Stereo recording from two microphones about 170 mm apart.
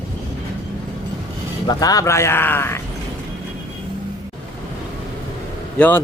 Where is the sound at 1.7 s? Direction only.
20° left (ahead or behind).